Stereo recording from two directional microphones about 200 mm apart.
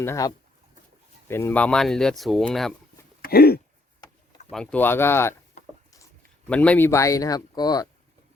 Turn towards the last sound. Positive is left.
turn(degrees=20)  # may be behind; listen again after turning